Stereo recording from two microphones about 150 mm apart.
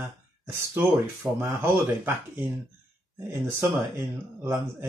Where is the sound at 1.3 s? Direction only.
15° right (ahead or behind).